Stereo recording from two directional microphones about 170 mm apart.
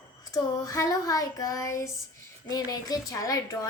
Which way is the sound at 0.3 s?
20° left (ahead or behind).